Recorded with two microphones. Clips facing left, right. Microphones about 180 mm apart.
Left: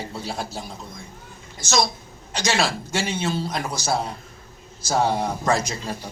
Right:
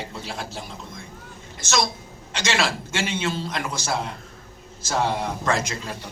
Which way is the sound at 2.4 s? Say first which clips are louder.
Left 1 dB; 40° left (ahead or behind).